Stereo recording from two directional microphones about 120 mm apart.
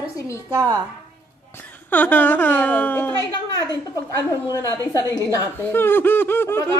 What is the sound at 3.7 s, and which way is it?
A woman's voice, 30° left (ahead or behind).